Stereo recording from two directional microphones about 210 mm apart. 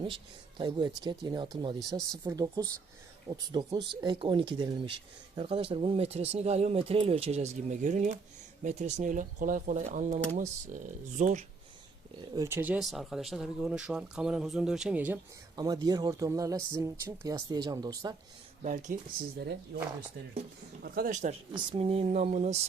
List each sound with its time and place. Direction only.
0.6 s speech: 20° right (ahead or behind)
12.3 s speech: 15° right (ahead or behind)
15.5 s speech: 20° right (ahead or behind)
18.6 s speech: 35° right (ahead or behind)
19.4 s speech: 50° right (ahead or behind)
20.8 s speech: 45° right (ahead or behind)
21.5 s speech: 25° right (ahead or behind)